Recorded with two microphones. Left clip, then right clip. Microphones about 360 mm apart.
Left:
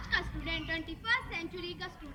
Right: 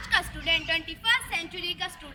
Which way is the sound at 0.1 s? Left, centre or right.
Centre.